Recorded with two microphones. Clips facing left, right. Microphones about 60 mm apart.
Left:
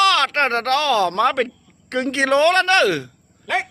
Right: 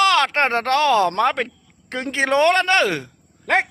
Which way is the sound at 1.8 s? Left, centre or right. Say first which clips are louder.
Left 2 dB; centre.